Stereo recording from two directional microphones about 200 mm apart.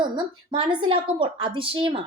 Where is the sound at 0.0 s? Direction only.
20° right (ahead or behind).